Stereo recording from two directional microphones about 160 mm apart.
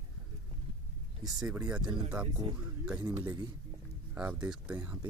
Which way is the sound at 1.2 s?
5° right (ahead or behind).